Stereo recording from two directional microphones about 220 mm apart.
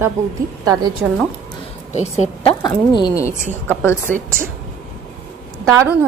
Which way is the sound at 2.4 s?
20° left (ahead or behind).